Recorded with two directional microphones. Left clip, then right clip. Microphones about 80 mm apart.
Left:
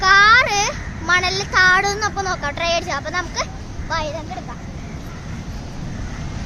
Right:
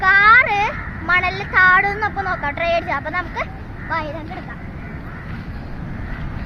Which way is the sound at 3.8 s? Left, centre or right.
Left.